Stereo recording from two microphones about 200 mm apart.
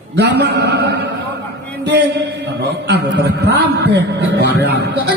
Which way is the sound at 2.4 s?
60° right (ahead or behind).